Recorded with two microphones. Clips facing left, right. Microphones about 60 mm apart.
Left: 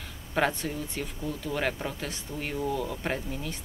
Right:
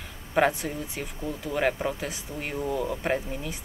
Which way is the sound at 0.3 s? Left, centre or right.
Centre.